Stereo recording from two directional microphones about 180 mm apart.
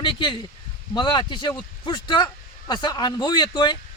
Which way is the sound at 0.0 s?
25° left (ahead or behind).